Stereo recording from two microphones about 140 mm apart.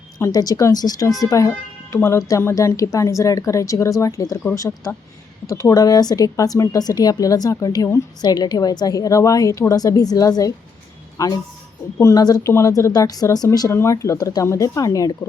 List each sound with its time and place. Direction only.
0.2 s speech: 25° left (ahead or behind)